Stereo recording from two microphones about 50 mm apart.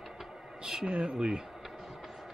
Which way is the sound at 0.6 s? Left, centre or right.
Centre.